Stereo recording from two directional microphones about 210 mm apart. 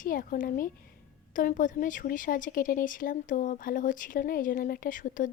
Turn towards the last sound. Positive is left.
turn(degrees=40)  # may be behind; listen again after turning